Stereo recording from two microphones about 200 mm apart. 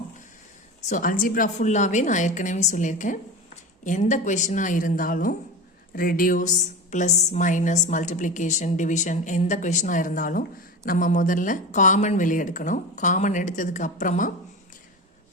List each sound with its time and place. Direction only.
0.9 s a woman's voice: 40° left (ahead or behind)